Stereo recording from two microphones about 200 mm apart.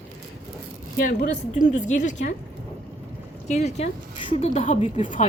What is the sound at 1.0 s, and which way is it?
Speech, 40° left (ahead or behind).